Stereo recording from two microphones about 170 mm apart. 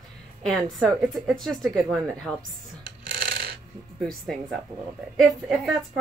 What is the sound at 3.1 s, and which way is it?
Filing, 70° right (ahead or behind).